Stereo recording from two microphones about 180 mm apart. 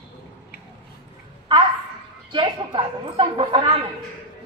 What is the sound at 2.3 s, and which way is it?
A woman's voice, 30° right (ahead or behind).